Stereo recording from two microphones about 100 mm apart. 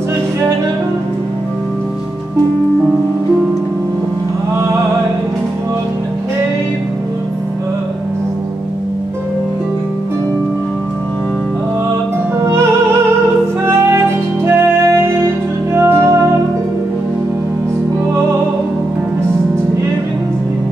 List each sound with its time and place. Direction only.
14.4 s music: 30° right (ahead or behind)